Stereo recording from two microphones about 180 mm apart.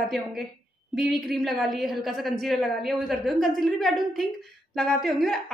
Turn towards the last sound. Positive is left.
turn(degrees=0)  # may be behind; listen again after turning